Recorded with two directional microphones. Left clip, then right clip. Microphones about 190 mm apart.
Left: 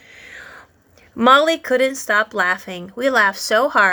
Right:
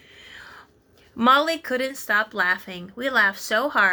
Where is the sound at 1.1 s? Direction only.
35° left (ahead or behind).